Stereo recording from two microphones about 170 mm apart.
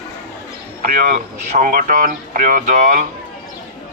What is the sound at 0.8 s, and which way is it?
Speech, 60° right (ahead or behind).